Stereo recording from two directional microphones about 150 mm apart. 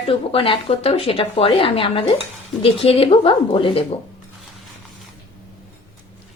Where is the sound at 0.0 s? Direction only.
40° left (ahead or behind).